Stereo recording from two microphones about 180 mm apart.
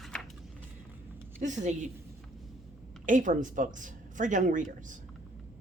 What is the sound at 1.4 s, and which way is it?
Speech, 40° right (ahead or behind).